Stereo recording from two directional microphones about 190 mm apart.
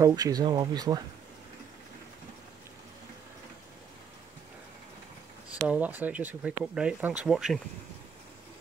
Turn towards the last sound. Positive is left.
turn(degrees=0)  # may be behind; listen again after turning